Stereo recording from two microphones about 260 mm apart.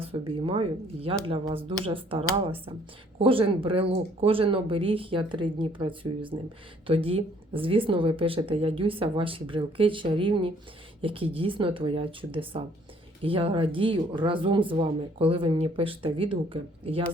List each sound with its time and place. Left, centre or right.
0.0 s speech: right